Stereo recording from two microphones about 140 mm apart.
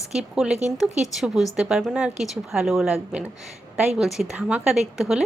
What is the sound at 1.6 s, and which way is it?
A woman's voice, 5° right (ahead or behind).